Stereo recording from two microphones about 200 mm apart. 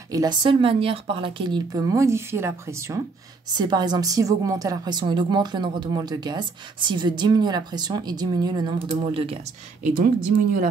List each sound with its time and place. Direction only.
0.1 s a woman's voice: 20° right (ahead or behind)
9.8 s speech: 45° right (ahead or behind)